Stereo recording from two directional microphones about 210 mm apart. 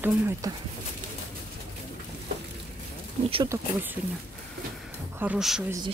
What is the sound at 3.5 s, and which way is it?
Speech, 15° right (ahead or behind).